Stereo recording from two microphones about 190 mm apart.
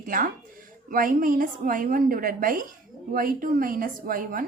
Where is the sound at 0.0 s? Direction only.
45° right (ahead or behind).